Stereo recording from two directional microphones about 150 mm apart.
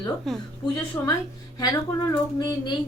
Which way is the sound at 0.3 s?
Centre (ahead or behind).